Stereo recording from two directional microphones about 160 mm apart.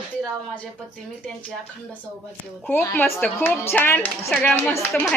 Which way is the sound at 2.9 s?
10° left (ahead or behind).